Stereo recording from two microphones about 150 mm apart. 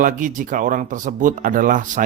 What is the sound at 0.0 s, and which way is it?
Speech, 60° right (ahead or behind).